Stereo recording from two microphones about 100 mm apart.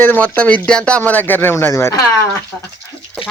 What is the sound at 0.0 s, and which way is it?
Speech, 15° left (ahead or behind).